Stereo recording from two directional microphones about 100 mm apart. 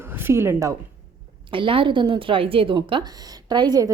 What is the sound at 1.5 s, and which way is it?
A woman's voice, 60° right (ahead or behind).